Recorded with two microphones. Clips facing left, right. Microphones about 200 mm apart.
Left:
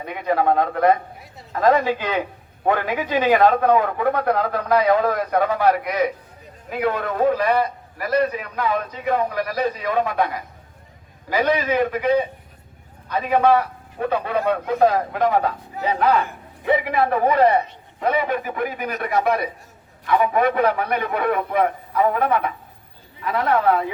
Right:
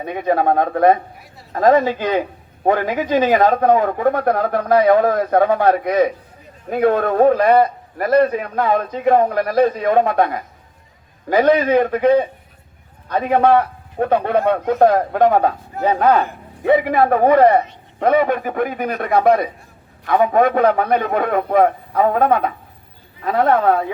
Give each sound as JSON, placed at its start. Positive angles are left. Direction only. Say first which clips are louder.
{"t": 0.1, "sound": "a man's voice", "louder": "right 3 dB", "side_deg": -45}
{"t": 1.8, "sound": "a man's voice", "louder": "right 4 dB", "side_deg": -40}